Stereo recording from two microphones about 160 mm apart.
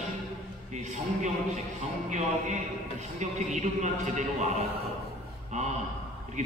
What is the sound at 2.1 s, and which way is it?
A man's voice, 45° right (ahead or behind).